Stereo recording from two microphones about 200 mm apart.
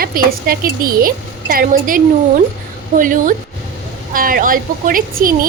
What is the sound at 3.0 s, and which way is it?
A woman's voice, 40° right (ahead or behind).